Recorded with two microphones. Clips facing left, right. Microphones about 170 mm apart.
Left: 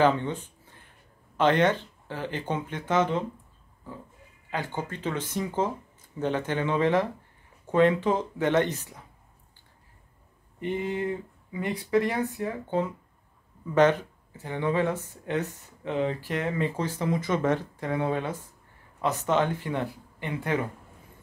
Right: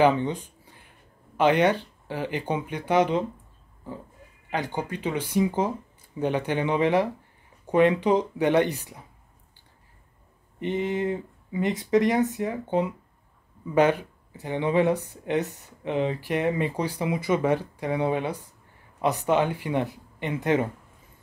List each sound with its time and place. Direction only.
0.0 s speech: 15° right (ahead or behind)
4.5 s speech: 15° right (ahead or behind)
10.6 s speech: 20° right (ahead or behind)